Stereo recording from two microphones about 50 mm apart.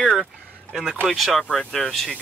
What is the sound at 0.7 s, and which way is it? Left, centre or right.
Speech, centre.